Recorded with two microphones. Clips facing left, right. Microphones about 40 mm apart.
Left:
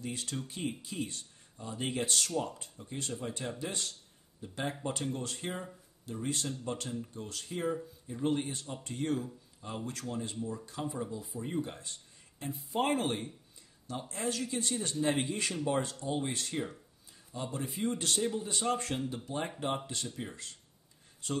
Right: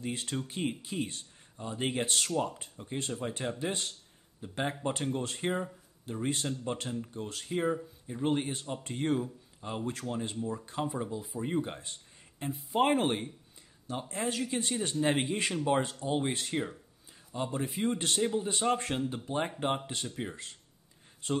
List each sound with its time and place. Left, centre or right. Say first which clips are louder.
0.0 s speech: right 3 dB; right